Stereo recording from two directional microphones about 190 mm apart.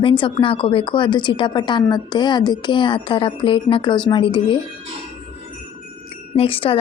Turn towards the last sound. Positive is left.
turn(degrees=30)  # may be behind; listen again after turning